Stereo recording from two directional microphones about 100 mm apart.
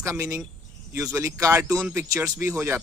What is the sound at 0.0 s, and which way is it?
Speech, 30° right (ahead or behind).